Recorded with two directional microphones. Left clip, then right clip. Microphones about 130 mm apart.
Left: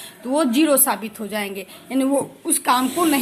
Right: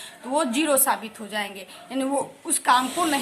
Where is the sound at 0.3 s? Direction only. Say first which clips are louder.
Left 4 dB; 25° left (ahead or behind).